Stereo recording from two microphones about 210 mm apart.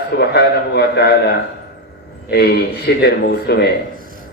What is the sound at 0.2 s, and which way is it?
A man's voice, 50° left (ahead or behind).